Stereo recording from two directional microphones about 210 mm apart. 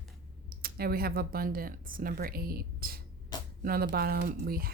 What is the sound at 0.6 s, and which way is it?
Speech, 45° right (ahead or behind).